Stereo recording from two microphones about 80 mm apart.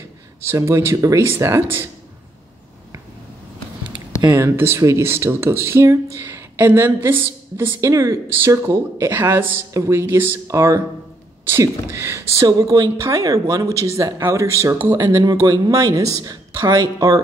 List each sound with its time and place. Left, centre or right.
0.4 s speech: right
4.4 s a woman's voice: right
10.5 s speech: right
12.4 s speech: right
14.9 s speech: right